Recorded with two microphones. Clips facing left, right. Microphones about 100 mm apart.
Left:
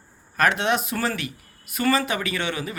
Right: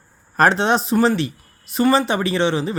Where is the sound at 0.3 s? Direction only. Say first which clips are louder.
Right 5 dB; 35° right (ahead or behind).